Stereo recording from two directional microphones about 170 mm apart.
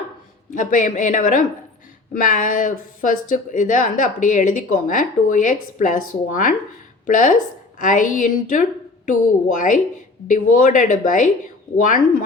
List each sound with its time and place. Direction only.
0.5 s speech: 50° left (ahead or behind)